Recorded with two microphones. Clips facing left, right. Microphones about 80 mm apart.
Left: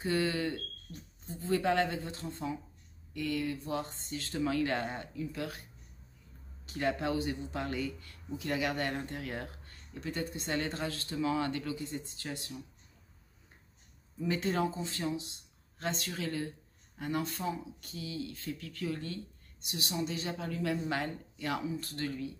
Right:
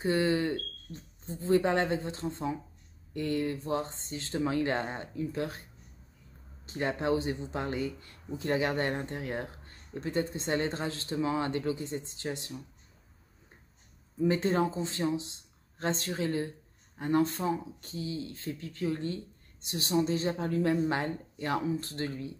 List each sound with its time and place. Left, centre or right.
0.0 s speech: right
6.6 s speech: right
14.2 s speech: right